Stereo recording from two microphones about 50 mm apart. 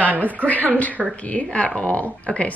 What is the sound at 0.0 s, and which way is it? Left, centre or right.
Speech, right.